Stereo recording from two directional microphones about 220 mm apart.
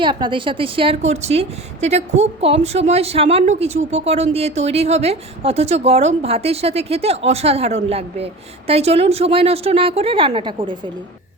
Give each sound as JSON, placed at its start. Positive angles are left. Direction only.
{"t": 0.0, "sound": "a woman's voice", "side_deg": -20}